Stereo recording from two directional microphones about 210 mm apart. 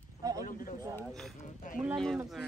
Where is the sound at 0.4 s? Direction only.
40° left (ahead or behind).